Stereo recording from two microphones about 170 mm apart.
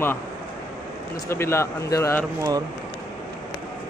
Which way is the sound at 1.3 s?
15° left (ahead or behind).